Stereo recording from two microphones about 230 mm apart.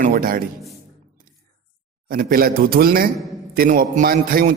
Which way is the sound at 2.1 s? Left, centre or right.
Right.